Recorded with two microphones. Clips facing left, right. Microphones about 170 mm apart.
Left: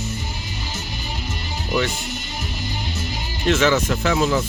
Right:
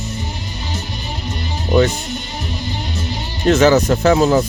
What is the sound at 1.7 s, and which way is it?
Speech, 40° right (ahead or behind).